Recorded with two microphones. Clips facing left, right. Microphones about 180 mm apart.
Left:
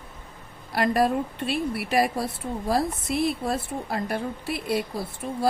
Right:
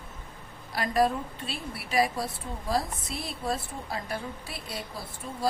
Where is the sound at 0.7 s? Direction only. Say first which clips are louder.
Left 4 dB; 60° left (ahead or behind).